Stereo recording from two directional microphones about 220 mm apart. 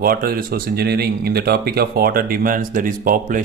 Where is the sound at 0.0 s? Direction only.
40° right (ahead or behind).